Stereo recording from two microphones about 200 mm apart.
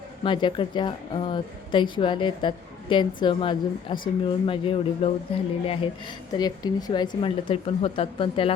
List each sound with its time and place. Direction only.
0.3 s a woman's voice: 25° left (ahead or behind)